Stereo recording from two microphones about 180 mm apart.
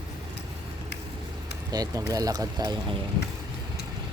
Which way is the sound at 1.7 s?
20° right (ahead or behind).